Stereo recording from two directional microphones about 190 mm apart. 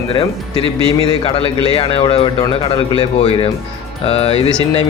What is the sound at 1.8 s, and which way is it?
Speech, 30° left (ahead or behind).